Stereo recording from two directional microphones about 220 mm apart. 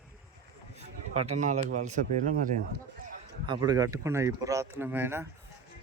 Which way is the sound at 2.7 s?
45° right (ahead or behind).